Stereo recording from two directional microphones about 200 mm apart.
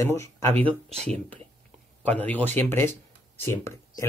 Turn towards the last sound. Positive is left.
turn(degrees=15)  # may be behind; listen again after turning